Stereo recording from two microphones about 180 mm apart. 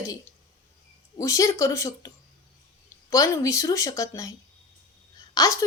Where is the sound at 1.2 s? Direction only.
15° left (ahead or behind).